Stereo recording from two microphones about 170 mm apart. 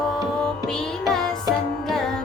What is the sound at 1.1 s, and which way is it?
Music, 5° left (ahead or behind).